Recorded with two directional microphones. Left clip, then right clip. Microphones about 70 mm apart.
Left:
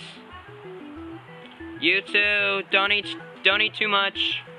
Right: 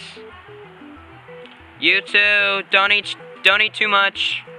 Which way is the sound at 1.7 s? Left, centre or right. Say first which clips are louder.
Right 5 dB; right.